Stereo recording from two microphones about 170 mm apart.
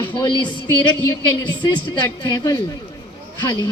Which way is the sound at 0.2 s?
25° left (ahead or behind).